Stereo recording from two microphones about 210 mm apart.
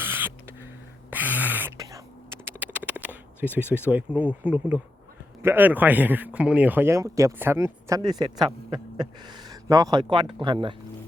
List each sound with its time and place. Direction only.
0.0 s rodents: 10° right (ahead or behind)
1.1 s a sound: 10° right (ahead or behind)
2.7 s speech: 5° right (ahead or behind); by 10.8 s 25° right (ahead or behind)